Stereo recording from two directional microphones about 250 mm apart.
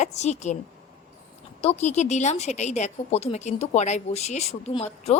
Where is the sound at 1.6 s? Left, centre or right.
Left.